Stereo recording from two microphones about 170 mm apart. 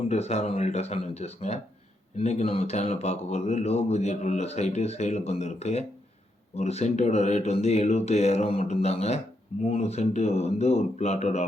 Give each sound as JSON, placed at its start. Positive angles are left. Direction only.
{"t": 0.1, "sound": "speech", "side_deg": 40}